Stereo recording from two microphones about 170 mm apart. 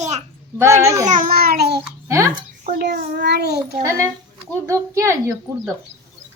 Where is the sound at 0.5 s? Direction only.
15° right (ahead or behind).